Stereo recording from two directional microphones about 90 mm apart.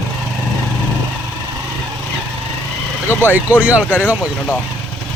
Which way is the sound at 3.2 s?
20° right (ahead or behind).